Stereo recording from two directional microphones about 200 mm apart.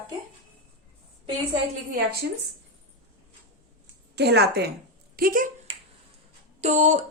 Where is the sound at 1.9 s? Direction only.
50° right (ahead or behind).